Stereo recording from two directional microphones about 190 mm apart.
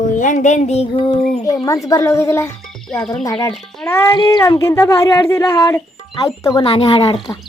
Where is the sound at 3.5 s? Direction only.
5° left (ahead or behind); by 7.3 s 25° left (ahead or behind).